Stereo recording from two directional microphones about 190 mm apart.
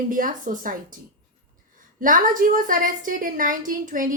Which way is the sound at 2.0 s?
45° right (ahead or behind).